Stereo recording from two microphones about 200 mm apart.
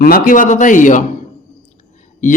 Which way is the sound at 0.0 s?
45° left (ahead or behind).